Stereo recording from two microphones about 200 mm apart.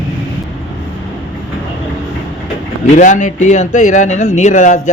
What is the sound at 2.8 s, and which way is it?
Speech, 35° left (ahead or behind).